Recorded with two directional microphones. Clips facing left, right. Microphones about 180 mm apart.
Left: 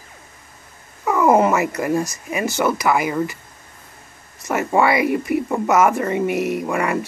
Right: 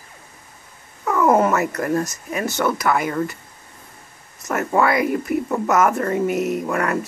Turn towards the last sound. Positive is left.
turn(degrees=5)  # may be behind; listen again after turning